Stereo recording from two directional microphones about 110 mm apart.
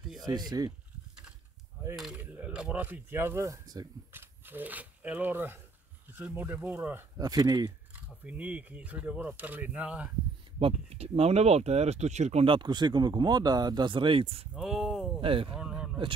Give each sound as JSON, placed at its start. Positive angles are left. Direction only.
{"t": 0.2, "sound": "speech", "side_deg": -40}
{"t": 2.1, "sound": "speech", "side_deg": -15}
{"t": 4.1, "sound": "speech", "side_deg": -20}
{"t": 7.2, "sound": "speech", "side_deg": -35}
{"t": 7.9, "sound": "speech", "side_deg": -15}
{"t": 10.6, "sound": "speech", "side_deg": -70}
{"t": 12.4, "sound": "speech", "side_deg": -45}
{"t": 14.5, "sound": "a sound", "side_deg": -5}
{"t": 15.1, "sound": "speech", "side_deg": -55}
{"t": 15.5, "sound": "a sound", "side_deg": -5}